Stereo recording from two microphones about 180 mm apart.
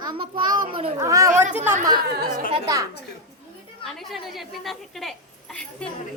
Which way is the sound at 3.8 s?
Centre (ahead or behind).